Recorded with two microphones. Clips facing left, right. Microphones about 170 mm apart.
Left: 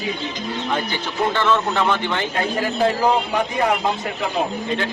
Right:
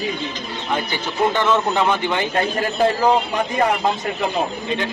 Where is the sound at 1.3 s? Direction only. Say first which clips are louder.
Left 1 dB; 15° right (ahead or behind).